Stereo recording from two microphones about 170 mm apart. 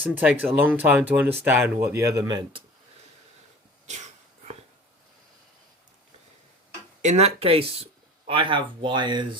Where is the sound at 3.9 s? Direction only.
45° right (ahead or behind).